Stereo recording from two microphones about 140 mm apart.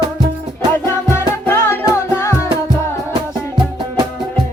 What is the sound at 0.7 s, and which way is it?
Music, 20° left (ahead or behind).